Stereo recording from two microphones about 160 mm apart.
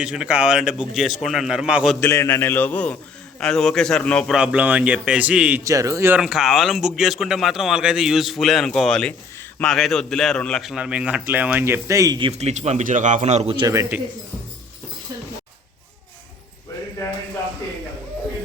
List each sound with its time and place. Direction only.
0.0 s speech: 5° right (ahead or behind)
2.0 s a man's voice: 15° left (ahead or behind)
4.4 s a man's voice: 5° right (ahead or behind)
5.6 s speech: 20° right (ahead or behind)
6.1 s speech: centre (ahead or behind); by 12.3 s 25° right (ahead or behind)
12.3 s a man's voice: 45° right (ahead or behind)
13.7 s speech: 20° right (ahead or behind)